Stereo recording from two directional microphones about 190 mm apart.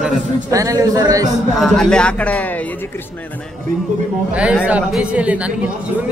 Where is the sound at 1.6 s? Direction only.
5° left (ahead or behind).